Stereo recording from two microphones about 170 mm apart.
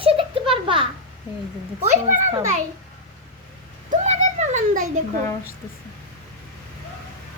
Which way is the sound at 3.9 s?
45° right (ahead or behind).